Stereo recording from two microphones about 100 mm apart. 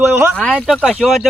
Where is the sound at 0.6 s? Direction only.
5° right (ahead or behind).